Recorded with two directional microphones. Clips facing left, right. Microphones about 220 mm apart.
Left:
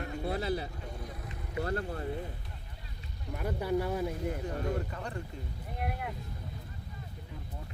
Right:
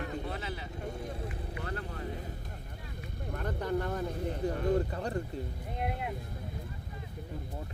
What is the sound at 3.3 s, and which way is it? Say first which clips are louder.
Speech: left 2 dB; 10° left (ahead or behind).